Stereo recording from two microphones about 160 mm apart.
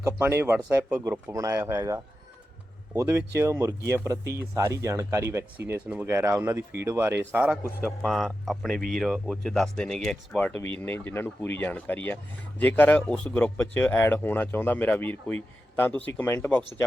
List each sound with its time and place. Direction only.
0.0 s speech: 15° right (ahead or behind)
8.0 s speech: centre (ahead or behind)